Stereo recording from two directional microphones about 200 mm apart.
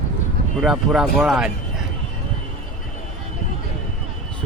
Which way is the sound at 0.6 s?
Centre (ahead or behind).